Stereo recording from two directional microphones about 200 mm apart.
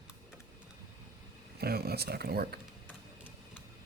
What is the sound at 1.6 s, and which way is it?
Speech, 50° right (ahead or behind).